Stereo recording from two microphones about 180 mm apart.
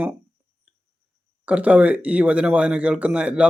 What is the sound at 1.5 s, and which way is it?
Speech, 10° right (ahead or behind).